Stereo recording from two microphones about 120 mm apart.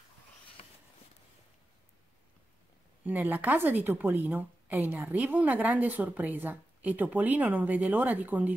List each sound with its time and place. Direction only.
3.0 s a woman's voice: 15° right (ahead or behind)